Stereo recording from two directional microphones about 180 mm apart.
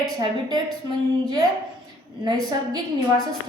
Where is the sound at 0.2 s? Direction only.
20° right (ahead or behind).